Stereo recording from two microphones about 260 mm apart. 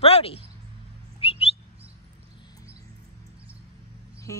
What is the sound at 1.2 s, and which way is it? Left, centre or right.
Bird, left.